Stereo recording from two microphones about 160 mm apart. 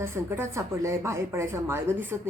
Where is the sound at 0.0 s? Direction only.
15° right (ahead or behind).